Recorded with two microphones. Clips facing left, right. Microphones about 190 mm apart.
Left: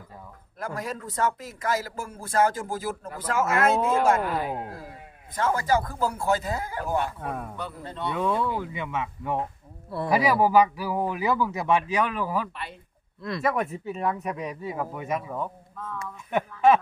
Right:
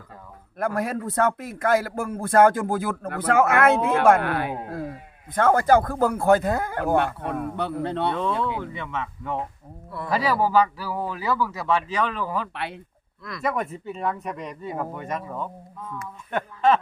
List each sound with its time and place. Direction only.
0.6 s a man's voice: 60° right (ahead or behind)
8.1 s a man's voice: 10° left (ahead or behind)
12.5 s speech: 70° right (ahead or behind)
13.4 s speech: centre (ahead or behind)